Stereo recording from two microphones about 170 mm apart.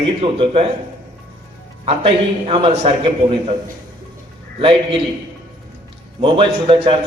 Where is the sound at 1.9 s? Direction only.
35° right (ahead or behind).